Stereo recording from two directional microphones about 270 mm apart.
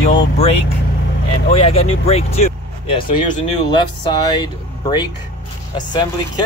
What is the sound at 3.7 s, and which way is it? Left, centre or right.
Speech, centre.